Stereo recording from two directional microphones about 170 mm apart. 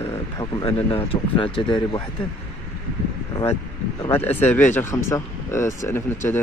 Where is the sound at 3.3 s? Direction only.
20° left (ahead or behind).